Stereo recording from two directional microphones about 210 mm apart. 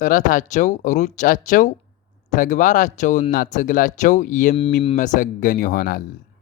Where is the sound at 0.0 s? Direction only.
40° left (ahead or behind).